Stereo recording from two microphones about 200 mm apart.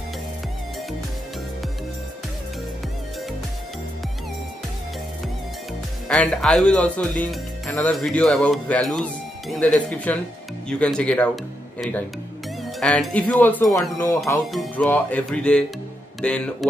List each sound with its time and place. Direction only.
6.0 s speech: 5° left (ahead or behind)
12.8 s speech: 5° left (ahead or behind)
14.2 s speech: centre (ahead or behind)